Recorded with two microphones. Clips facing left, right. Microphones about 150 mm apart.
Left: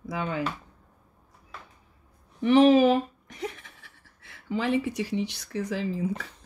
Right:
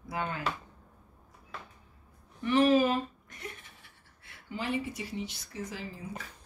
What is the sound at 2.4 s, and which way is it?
Speech, 90° left.